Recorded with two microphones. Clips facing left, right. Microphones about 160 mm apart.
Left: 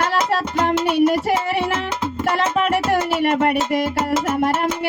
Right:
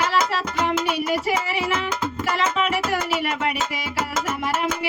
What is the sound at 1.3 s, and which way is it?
Music, 55° left (ahead or behind).